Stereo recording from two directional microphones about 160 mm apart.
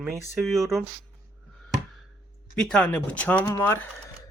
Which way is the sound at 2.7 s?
10° left (ahead or behind).